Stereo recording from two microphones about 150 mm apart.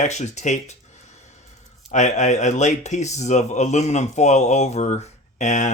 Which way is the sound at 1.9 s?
50° left (ahead or behind).